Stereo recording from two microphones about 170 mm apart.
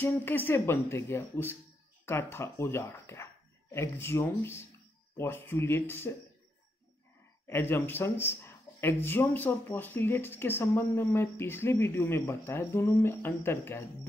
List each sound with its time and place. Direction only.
0.0 s speech: 10° left (ahead or behind)
7.4 s speech: 15° left (ahead or behind)